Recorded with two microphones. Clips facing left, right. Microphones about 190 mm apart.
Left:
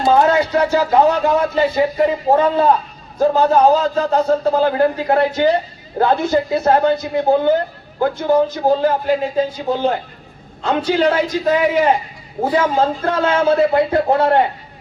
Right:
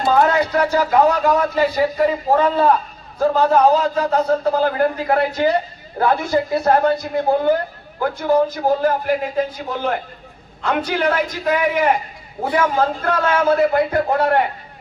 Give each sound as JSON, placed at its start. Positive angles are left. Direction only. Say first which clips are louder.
{"t": 0.0, "sound": "a woman's voice", "louder": "left 2 dB", "side_deg": 25}